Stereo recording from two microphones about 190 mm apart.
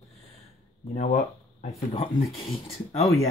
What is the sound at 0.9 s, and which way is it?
Speech, 40° left (ahead or behind).